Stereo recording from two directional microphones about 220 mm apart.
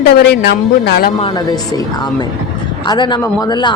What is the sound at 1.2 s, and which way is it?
Speech, 20° left (ahead or behind).